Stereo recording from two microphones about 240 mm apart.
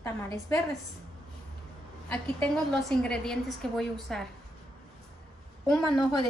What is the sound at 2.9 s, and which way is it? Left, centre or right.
A woman's voice, centre.